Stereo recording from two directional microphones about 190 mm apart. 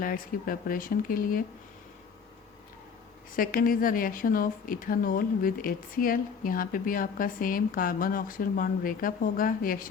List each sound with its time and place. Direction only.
0.0 s a woman's voice: 50° left (ahead or behind)
3.3 s a woman's voice: 45° left (ahead or behind)